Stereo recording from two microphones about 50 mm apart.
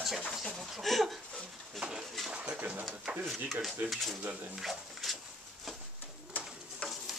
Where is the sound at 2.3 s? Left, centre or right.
Right.